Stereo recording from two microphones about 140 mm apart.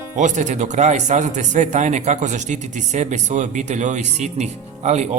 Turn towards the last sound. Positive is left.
turn(degrees=-55)  # may be behind; listen again after turning